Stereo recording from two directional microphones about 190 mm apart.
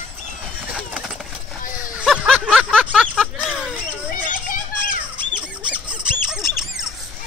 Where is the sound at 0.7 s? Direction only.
5° right (ahead or behind).